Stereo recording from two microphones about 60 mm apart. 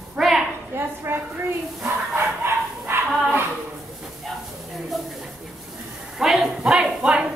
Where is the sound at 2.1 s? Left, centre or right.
Right.